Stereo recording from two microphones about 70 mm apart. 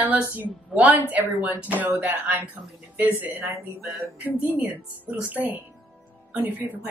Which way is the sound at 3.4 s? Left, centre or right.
Right.